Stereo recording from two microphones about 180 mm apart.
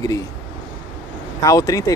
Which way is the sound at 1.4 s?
20° left (ahead or behind).